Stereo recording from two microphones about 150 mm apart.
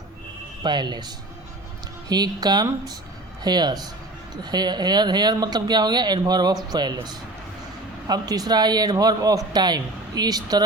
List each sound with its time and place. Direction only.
0.6 s speech: 30° right (ahead or behind)